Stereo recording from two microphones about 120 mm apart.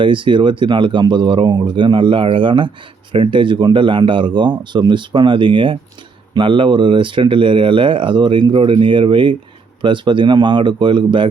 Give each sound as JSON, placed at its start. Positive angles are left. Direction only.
{"t": 0.0, "sound": "speech", "side_deg": -45}